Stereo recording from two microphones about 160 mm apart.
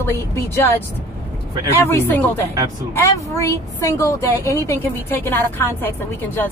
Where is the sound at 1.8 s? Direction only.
15° left (ahead or behind).